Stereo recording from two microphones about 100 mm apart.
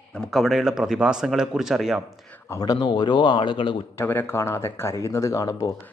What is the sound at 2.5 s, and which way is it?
Speech, 40° left (ahead or behind).